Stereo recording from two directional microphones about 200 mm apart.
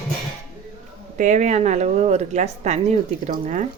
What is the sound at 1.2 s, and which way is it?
Speech, 35° right (ahead or behind).